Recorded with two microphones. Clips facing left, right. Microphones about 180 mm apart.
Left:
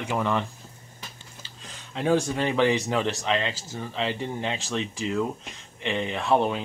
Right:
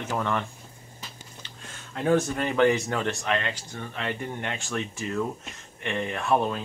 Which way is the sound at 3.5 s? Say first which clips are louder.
Left 2 dB; 5° left (ahead or behind).